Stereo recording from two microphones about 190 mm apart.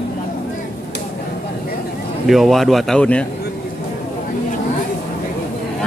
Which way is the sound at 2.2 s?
Centre (ahead or behind).